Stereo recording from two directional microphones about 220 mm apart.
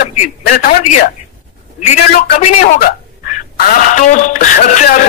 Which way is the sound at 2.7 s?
45° left (ahead or behind).